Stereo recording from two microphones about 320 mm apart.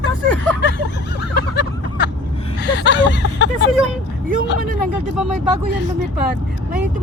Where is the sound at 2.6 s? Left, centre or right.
Left.